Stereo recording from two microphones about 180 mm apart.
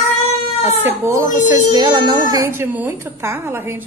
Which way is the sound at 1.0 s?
15° right (ahead or behind).